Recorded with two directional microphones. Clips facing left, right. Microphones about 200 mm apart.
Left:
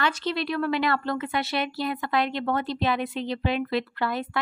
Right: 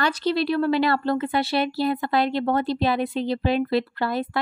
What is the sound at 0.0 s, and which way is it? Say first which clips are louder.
Speech: right 4 dB; 35° right (ahead or behind).